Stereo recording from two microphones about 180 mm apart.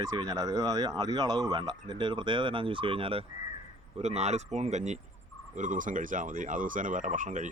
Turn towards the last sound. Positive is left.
turn(degrees=-45)  # may be behind; listen again after turning